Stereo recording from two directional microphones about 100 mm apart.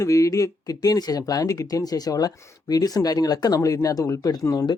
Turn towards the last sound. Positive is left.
turn(degrees=35)  # may be behind; listen again after turning